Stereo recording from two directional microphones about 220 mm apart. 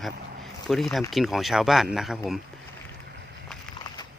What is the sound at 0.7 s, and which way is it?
Speech, centre (ahead or behind).